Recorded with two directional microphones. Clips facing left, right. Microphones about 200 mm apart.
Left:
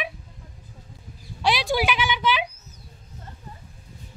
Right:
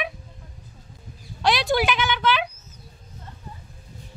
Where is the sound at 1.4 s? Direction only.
10° left (ahead or behind).